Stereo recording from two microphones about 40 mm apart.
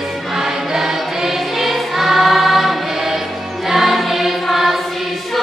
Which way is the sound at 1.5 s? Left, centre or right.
Centre.